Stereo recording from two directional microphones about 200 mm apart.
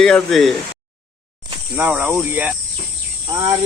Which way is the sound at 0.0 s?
Centre (ahead or behind).